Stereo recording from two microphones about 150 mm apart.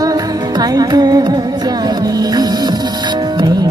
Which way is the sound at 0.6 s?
25° right (ahead or behind).